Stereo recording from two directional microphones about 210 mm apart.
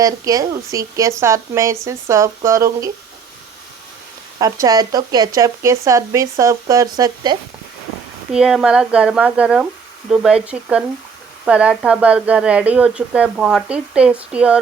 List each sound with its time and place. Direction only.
0.0 s speech: 15° right (ahead or behind)
4.4 s speech: 15° right (ahead or behind)
8.3 s a woman's voice: 5° right (ahead or behind)